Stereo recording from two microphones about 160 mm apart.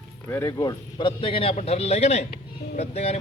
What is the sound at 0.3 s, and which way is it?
A man's voice, 20° left (ahead or behind).